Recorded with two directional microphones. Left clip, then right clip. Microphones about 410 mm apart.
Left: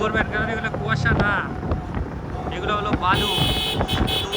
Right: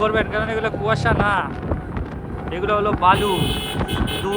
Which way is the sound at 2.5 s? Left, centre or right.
Centre.